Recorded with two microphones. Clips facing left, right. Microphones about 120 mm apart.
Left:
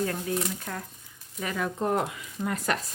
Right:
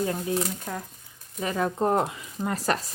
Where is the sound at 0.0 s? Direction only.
20° right (ahead or behind).